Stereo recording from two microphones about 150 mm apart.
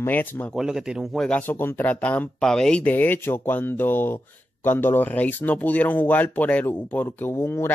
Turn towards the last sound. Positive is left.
turn(degrees=15)  # may be behind; listen again after turning